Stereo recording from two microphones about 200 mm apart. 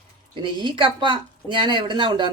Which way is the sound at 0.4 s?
25° right (ahead or behind).